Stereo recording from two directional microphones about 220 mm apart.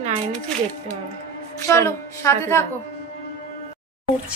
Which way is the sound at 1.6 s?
10° left (ahead or behind).